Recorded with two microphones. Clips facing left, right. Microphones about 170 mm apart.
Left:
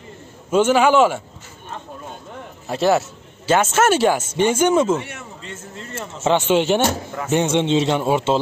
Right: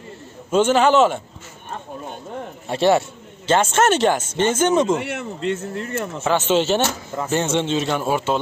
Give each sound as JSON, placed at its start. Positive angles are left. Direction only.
{"t": 0.5, "sound": "a man's voice", "side_deg": 10}
{"t": 2.7, "sound": "a man's voice", "side_deg": 0}
{"t": 5.0, "sound": "a man's voice", "side_deg": -75}
{"t": 6.2, "sound": "a man's voice", "side_deg": 15}